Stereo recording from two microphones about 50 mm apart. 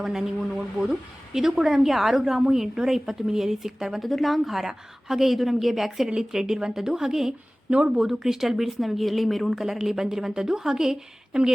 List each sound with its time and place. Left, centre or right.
0.0 s a woman's voice: centre